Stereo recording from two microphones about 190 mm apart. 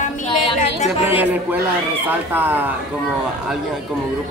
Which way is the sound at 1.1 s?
10° right (ahead or behind).